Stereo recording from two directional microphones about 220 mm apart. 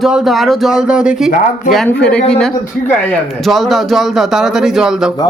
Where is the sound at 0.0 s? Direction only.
Centre (ahead or behind).